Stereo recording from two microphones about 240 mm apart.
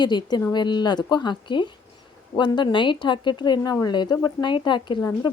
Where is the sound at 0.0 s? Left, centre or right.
Centre.